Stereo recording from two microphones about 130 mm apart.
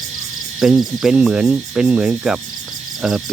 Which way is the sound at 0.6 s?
Centre (ahead or behind).